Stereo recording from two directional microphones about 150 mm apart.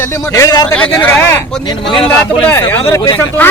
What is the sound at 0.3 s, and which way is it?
Speech, 25° left (ahead or behind).